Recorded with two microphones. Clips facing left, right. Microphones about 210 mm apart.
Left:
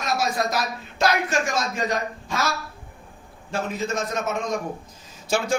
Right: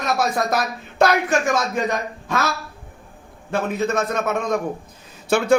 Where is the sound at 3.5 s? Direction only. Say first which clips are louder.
Right 5 dB; 60° right (ahead or behind).